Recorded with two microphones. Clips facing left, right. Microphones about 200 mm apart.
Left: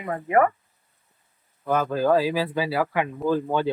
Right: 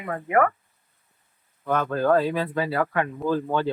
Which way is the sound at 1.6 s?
5° left (ahead or behind).